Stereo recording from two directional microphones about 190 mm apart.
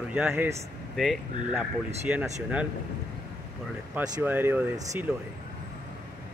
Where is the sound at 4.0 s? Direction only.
10° right (ahead or behind).